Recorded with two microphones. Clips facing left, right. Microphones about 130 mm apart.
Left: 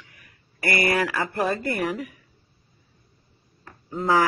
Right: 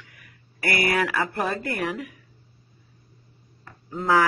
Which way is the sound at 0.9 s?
Centre (ahead or behind).